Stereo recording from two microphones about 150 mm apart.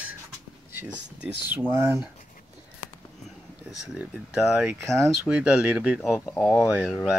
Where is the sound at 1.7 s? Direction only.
20° right (ahead or behind).